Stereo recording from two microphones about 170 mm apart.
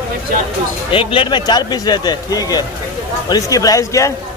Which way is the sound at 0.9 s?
30° left (ahead or behind).